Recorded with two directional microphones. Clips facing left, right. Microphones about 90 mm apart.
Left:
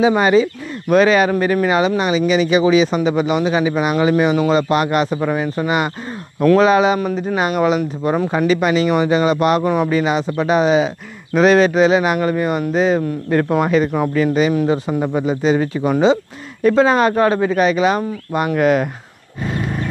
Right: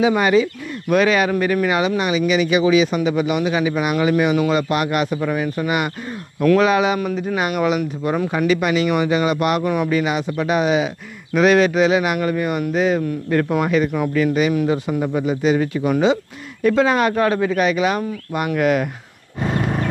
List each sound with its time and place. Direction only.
0.0 s speech: 30° left (ahead or behind)
19.4 s wild animals: 50° right (ahead or behind)